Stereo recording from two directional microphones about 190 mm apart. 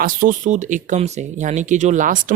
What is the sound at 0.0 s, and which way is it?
Speech, 45° right (ahead or behind).